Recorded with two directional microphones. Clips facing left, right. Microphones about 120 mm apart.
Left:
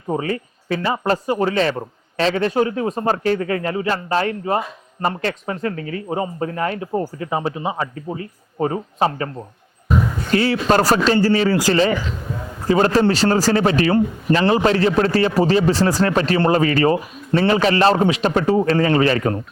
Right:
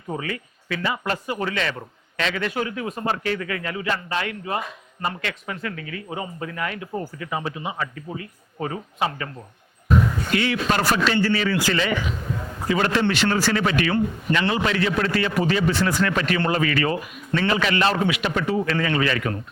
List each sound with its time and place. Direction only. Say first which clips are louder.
0.1 s speech: left 7 dB; 35° left (ahead or behind)
10.3 s speech: left 7 dB; 35° left (ahead or behind)